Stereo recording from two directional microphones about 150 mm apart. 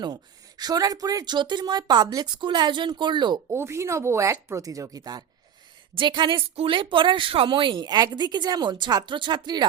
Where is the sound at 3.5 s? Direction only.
15° right (ahead or behind).